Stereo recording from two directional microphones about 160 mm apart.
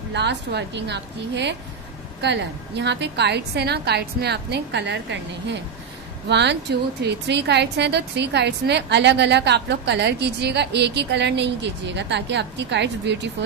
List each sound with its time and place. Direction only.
0.1 s a woman's voice: 90° right